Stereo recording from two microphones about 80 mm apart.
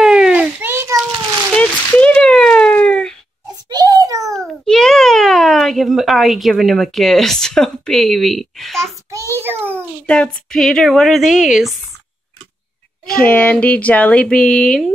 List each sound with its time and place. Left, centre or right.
0.0 s children playing: centre
0.7 s a sound: right
1.5 s a sound: centre
3.6 s a sound: right
4.6 s speech: centre
8.8 s a child's voice: right
9.4 s a child's voice: right
10.0 s a woman's voice: centre
13.0 s speech: centre